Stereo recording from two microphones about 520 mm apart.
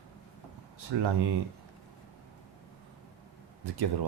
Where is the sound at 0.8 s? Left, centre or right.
Right.